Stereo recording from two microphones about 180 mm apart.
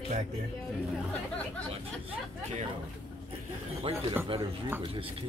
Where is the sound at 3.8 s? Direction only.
35° right (ahead or behind).